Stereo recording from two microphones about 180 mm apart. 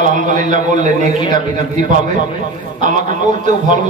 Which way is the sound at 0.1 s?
45° right (ahead or behind).